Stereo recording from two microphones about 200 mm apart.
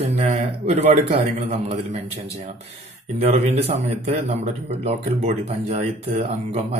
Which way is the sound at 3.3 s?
35° right (ahead or behind).